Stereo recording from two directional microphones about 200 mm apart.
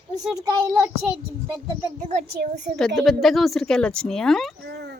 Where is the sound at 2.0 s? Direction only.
35° right (ahead or behind).